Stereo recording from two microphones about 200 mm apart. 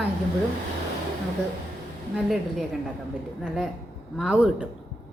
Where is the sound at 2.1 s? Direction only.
Centre (ahead or behind).